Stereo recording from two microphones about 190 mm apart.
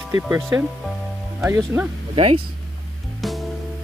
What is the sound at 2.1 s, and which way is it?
Speech, 30° right (ahead or behind).